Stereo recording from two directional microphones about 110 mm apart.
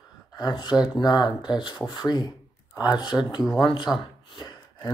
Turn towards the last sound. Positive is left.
turn(degrees=45)  # may be behind; listen again after turning